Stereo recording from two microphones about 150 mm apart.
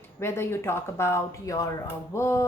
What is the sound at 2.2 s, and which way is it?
Music, 20° left (ahead or behind).